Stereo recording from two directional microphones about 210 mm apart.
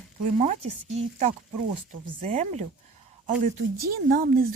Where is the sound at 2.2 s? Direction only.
30° right (ahead or behind).